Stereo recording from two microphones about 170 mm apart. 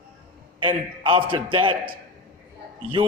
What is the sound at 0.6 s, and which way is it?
A man's voice, 30° right (ahead or behind).